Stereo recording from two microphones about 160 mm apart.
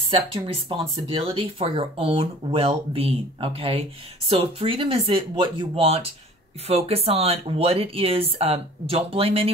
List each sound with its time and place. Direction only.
0.0 s speech: 35° right (ahead or behind)